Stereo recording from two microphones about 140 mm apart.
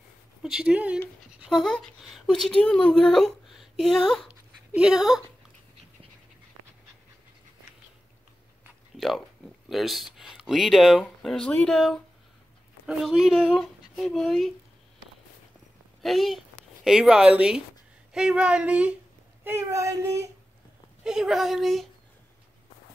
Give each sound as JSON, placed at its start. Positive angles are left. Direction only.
{"t": 0.4, "sound": "speech", "side_deg": -5}
{"t": 1.4, "sound": "speech", "side_deg": 0}
{"t": 4.3, "sound": "dog", "side_deg": -5}
{"t": 8.9, "sound": "a sound", "side_deg": 0}
{"t": 9.7, "sound": "speech", "side_deg": 0}
{"t": 16.0, "sound": "speech", "side_deg": 0}
{"t": 19.4, "sound": "child singing", "side_deg": -20}
{"t": 21.0, "sound": "speech", "side_deg": -5}